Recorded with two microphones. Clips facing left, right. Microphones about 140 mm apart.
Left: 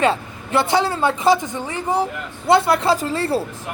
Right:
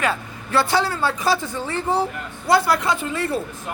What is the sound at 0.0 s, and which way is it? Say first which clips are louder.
Speech: left 5 dB; 25° left (ahead or behind).